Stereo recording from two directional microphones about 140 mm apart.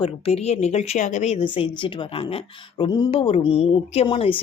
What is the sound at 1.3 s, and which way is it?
A woman's voice, 40° left (ahead or behind).